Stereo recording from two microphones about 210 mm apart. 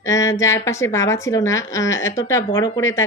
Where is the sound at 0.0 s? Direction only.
15° left (ahead or behind).